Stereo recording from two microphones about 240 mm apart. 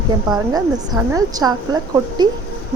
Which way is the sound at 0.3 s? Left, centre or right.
Centre.